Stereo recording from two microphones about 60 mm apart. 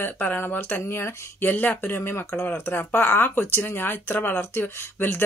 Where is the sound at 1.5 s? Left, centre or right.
Left.